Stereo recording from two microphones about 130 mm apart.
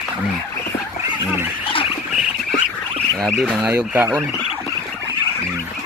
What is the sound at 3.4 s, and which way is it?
Speech, 10° right (ahead or behind).